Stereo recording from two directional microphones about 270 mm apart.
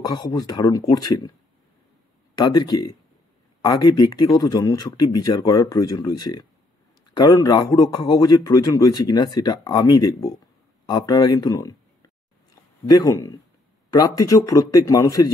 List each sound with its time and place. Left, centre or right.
0.3 s a man's voice: centre
2.3 s a man's voice: centre
13.0 s a man's voice: centre